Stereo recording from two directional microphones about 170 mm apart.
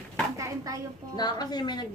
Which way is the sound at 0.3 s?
20° right (ahead or behind).